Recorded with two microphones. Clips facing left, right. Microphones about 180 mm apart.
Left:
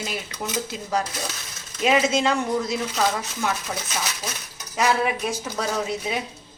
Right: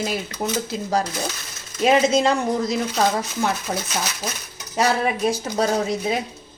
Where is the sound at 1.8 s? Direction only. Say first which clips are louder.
Right 3 dB; 35° right (ahead or behind).